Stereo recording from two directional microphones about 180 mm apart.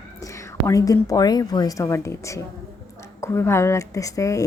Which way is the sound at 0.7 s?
20° left (ahead or behind).